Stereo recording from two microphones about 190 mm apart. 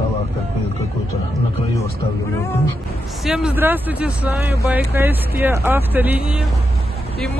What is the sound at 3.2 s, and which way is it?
Speech, 5° right (ahead or behind).